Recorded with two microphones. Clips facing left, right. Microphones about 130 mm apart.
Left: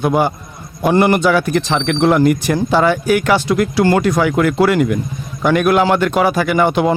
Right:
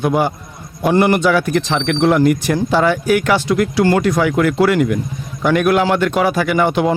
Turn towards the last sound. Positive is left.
turn(degrees=35)  # may be behind; listen again after turning